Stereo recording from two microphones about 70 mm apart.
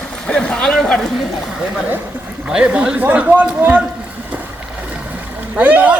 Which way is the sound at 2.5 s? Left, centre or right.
Centre.